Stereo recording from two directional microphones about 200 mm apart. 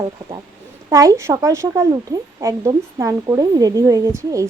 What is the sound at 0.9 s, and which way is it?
A woman's voice, 15° right (ahead or behind).